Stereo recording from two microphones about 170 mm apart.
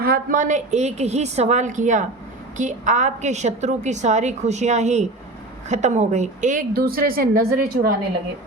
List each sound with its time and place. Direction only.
0.0 s a woman's voice: 55° right (ahead or behind)